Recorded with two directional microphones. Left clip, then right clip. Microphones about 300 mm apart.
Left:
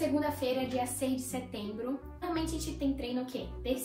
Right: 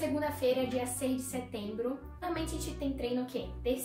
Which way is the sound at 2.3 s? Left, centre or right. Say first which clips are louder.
Left 5 dB; centre.